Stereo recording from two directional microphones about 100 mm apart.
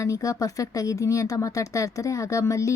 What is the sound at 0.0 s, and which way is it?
Speech, 35° left (ahead or behind).